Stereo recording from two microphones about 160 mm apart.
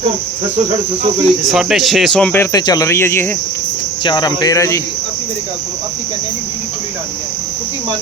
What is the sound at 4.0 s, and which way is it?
Speech, 30° left (ahead or behind).